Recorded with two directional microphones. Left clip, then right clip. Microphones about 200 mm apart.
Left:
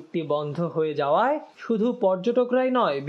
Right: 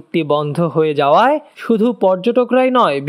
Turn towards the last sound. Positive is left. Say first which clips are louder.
# right 9 dB
turn(degrees=-40)  # may be behind; listen again after turning